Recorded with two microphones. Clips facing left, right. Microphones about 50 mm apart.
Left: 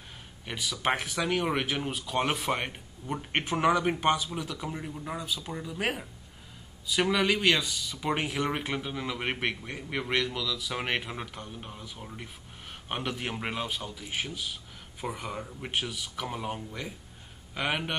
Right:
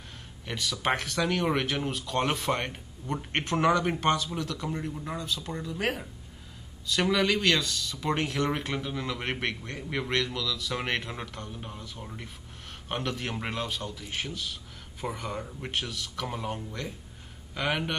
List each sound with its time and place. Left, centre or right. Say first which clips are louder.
0.5 s speech: right 1 dB; centre